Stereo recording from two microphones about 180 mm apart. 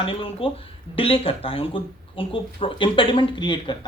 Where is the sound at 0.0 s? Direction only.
30° left (ahead or behind).